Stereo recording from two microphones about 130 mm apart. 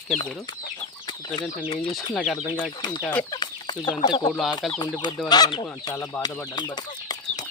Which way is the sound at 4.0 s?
35° left (ahead or behind).